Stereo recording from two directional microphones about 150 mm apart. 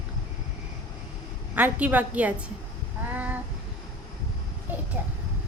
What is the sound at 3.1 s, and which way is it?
Child singing, 10° right (ahead or behind).